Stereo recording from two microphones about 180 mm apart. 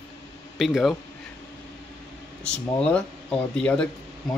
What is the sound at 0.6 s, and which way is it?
Speech, centre (ahead or behind).